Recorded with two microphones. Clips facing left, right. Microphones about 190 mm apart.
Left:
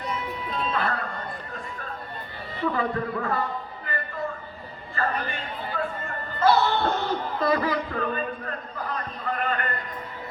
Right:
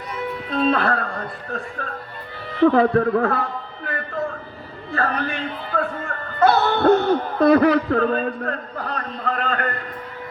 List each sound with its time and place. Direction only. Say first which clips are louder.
0.5 s a man's voice: right 9 dB; 75° right (ahead or behind)
4.9 s speech: right 5 dB; 80° right